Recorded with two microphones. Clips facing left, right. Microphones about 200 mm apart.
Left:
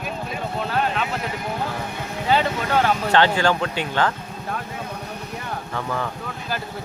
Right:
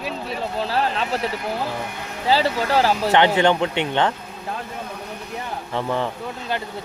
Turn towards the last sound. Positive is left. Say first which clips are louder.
# right 2 dB
turn(degrees=-25)  # may be behind; listen again after turning